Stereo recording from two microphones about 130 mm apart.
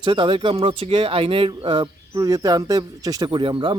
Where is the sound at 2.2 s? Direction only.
30° right (ahead or behind).